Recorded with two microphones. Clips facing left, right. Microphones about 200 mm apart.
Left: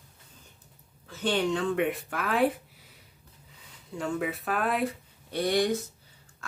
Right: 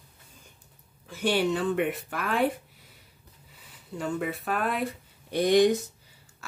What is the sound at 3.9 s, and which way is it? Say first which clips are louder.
Speech: even; centre (ahead or behind).